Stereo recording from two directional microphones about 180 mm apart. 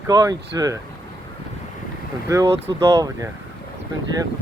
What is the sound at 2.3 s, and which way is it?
Speech, 15° right (ahead or behind).